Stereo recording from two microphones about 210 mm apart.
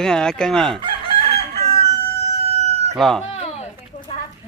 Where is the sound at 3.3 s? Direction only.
30° left (ahead or behind).